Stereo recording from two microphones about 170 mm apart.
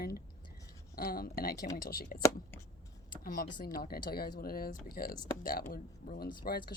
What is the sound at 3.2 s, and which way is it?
A woman's voice, 60° left (ahead or behind).